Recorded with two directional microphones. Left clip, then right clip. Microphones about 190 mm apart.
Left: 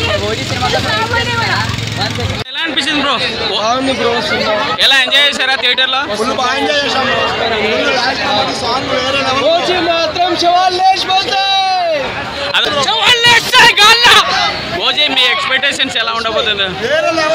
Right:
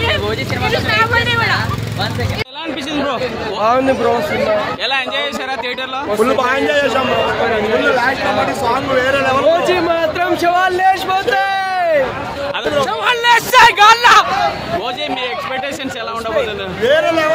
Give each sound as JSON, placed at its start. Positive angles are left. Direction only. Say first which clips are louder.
{"t": 4.8, "sound": "speech", "louder": "left 8 dB", "side_deg": 0}
{"t": 10.5, "sound": "a man's voice", "louder": "left 2 dB", "side_deg": -35}
{"t": 12.8, "sound": "a sound", "louder": "left 5 dB", "side_deg": -45}
{"t": 15.0, "sound": "speech", "louder": "left 9 dB", "side_deg": 5}
{"t": 16.8, "sound": "speech", "louder": "right 2 dB", "side_deg": -50}